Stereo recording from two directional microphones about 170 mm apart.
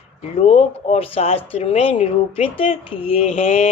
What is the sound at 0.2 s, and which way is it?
Speech, 40° left (ahead or behind).